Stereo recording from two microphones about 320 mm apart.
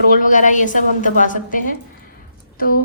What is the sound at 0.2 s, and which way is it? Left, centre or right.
A woman's voice, left.